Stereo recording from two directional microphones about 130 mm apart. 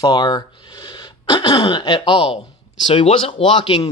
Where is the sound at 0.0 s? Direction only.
30° left (ahead or behind).